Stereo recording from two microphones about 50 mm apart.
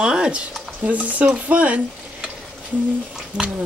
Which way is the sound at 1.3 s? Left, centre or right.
Right.